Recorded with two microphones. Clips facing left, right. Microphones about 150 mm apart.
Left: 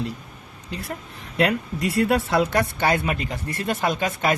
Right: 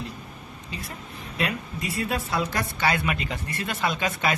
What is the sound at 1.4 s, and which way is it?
Speech, 70° left (ahead or behind).